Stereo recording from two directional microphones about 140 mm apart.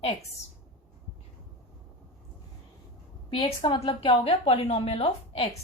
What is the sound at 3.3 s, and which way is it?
A woman's voice, 35° left (ahead or behind).